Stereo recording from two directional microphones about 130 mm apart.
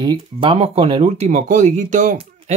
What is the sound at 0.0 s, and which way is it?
Speech, 35° right (ahead or behind).